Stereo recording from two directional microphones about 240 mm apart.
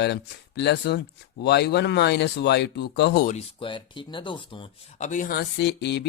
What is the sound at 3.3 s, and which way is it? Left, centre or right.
Speech, left.